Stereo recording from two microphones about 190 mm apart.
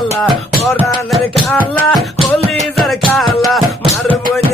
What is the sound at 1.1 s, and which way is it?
Music, centre (ahead or behind).